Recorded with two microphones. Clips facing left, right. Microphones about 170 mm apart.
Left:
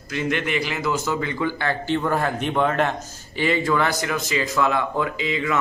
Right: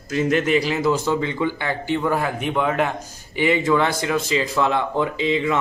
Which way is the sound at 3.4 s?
15° right (ahead or behind).